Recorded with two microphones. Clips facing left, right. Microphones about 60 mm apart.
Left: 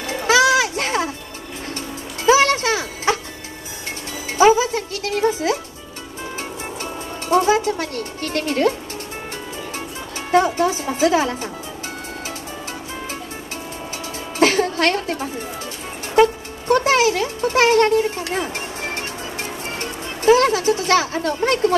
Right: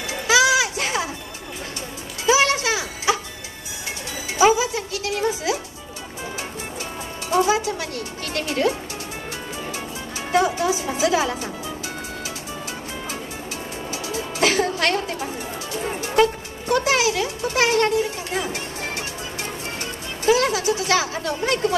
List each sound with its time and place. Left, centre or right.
0.0 s children playing: left
2.2 s music: left
4.6 s music: left
7.2 s music: left
10.3 s speech: left
14.1 s music: left
16.6 s a sound: left
19.8 s music: left